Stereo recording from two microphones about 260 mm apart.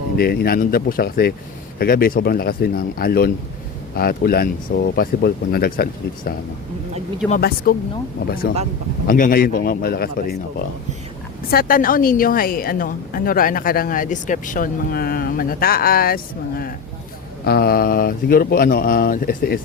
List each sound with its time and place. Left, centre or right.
0.2 s a woman's voice: left
11.5 s a woman's voice: left